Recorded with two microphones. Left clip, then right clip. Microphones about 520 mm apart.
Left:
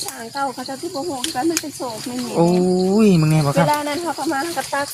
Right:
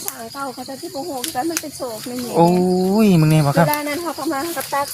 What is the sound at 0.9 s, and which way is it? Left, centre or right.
Speech, right.